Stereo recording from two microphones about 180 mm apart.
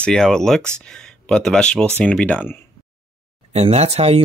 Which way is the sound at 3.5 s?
35° right (ahead or behind).